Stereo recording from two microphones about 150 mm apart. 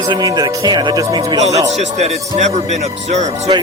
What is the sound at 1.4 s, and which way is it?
A man's voice, 45° right (ahead or behind).